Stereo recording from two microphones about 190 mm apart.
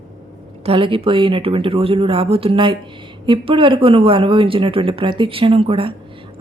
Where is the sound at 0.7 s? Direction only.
30° right (ahead or behind).